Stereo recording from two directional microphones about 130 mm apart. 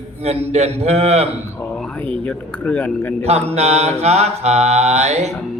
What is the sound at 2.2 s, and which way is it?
Speech, 10° left (ahead or behind).